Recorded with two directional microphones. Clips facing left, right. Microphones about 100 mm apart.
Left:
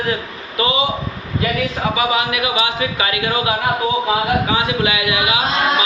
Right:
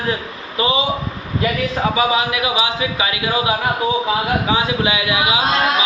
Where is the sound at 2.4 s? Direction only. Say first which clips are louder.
Even; 20° right (ahead or behind).